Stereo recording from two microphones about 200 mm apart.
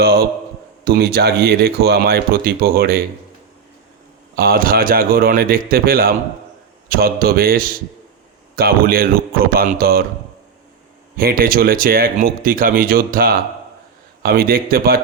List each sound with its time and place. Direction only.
0.0 s speech: 50° right (ahead or behind)
4.4 s speech: 50° right (ahead or behind)
11.2 s speech: 50° right (ahead or behind)